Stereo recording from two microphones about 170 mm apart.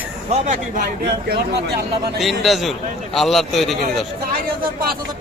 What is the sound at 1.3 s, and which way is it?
Speech, 70° right (ahead or behind).